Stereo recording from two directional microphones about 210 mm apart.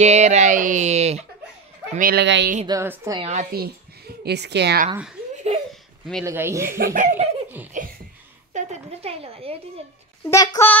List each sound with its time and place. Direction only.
0.0 s speech: 30° right (ahead or behind)
2.0 s speech: 45° right (ahead or behind)
2.6 s a woman's voice: 15° right (ahead or behind)
3.2 s speech: 30° right (ahead or behind)
3.5 s a woman's voice: 45° right (ahead or behind)
6.2 s a woman's voice: 15° right (ahead or behind)
6.8 s speech: 40° right (ahead or behind)
7.7 s a sound: 35° right (ahead or behind)
10.2 s a child's voice: 15° left (ahead or behind)